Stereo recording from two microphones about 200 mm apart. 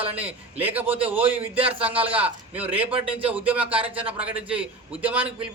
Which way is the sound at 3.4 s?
5° right (ahead or behind).